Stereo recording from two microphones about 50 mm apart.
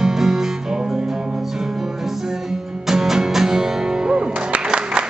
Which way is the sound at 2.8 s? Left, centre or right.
Centre.